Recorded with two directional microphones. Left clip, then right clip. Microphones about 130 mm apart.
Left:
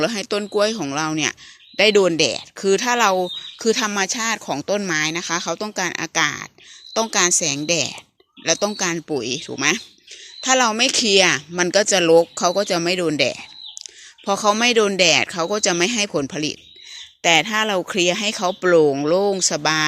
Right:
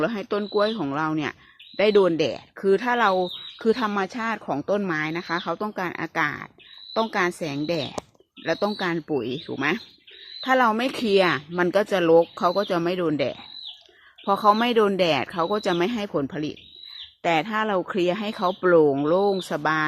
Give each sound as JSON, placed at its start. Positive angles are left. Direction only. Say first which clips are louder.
{"t": 0.0, "sound": "speech", "louder": "left 4 dB", "side_deg": 20}
{"t": 10.4, "sound": "speech", "louder": "left 3 dB", "side_deg": 5}
{"t": 14.4, "sound": "speech", "louder": "left 3 dB", "side_deg": 5}